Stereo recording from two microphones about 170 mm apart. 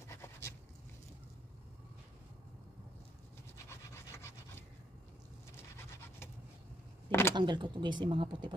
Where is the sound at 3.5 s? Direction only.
15° left (ahead or behind).